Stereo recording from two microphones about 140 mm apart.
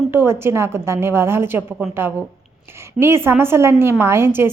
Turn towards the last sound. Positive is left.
turn(degrees=-15)  # may be behind; listen again after turning